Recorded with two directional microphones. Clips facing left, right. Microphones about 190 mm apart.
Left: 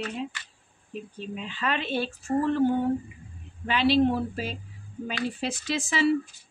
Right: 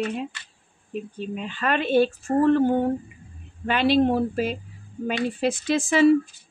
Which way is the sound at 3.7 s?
50° right (ahead or behind).